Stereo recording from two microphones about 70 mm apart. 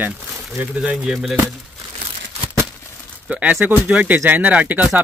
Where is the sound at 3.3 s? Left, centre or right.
Right.